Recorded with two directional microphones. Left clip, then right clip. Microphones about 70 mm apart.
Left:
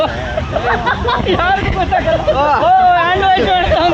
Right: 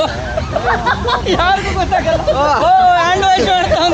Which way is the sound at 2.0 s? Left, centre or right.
Right.